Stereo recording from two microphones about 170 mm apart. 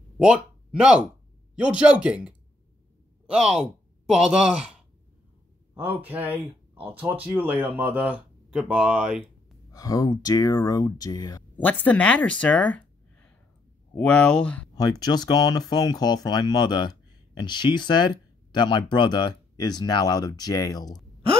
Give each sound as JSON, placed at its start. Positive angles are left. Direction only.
{"t": 0.2, "sound": "speech", "side_deg": -5}
{"t": 5.8, "sound": "speech", "side_deg": -10}
{"t": 9.7, "sound": "speech", "side_deg": 20}
{"t": 11.5, "sound": "speech", "side_deg": 10}
{"t": 14.8, "sound": "speech", "side_deg": 25}